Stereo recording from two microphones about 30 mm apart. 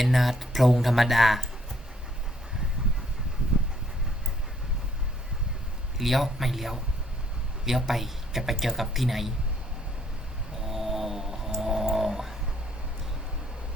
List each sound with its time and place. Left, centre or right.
0.0 s a man's voice: centre
6.0 s a man's voice: centre
10.6 s snoring: centre